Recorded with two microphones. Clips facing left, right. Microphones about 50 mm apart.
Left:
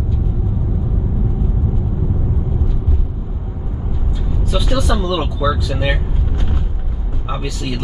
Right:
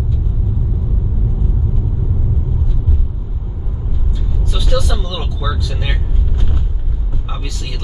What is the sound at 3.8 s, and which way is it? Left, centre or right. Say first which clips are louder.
Vehicle: left 1 dB; left.